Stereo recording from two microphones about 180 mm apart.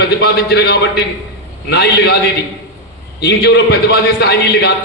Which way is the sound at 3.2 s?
65° left (ahead or behind).